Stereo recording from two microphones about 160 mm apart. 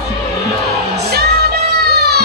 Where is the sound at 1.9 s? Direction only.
90° right.